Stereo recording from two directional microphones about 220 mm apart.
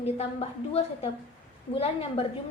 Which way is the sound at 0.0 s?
25° left (ahead or behind).